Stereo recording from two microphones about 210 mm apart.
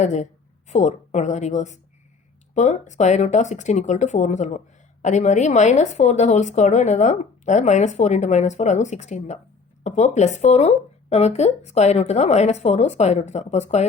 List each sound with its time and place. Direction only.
0.0 s a woman's voice: 35° left (ahead or behind)